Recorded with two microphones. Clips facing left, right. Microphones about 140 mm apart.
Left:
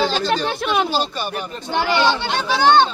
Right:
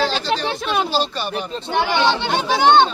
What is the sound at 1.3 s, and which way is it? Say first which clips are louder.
Speech: right 3 dB; 20° right (ahead or behind).